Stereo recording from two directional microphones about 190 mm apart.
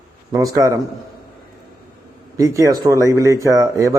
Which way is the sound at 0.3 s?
15° right (ahead or behind).